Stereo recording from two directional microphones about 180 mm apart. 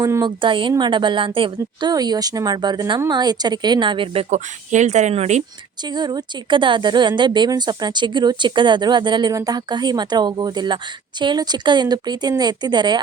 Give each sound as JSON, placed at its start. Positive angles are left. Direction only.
{"t": 0.0, "sound": "speech", "side_deg": -20}
{"t": 5.8, "sound": "speech", "side_deg": -25}